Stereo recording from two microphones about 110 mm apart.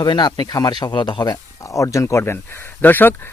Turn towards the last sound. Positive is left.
turn(degrees=15)  # may be behind; listen again after turning